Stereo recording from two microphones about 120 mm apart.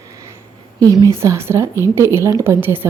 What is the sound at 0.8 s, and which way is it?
Speech, 30° right (ahead or behind).